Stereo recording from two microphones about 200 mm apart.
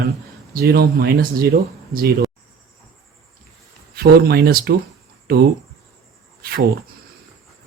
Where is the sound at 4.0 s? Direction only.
50° right (ahead or behind).